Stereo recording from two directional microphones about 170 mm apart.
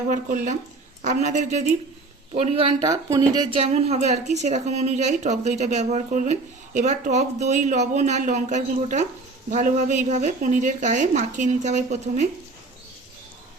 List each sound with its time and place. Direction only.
0.1 s speech: 50° right (ahead or behind)
2.8 s speech: 20° right (ahead or behind)
3.6 s speech: 35° right (ahead or behind)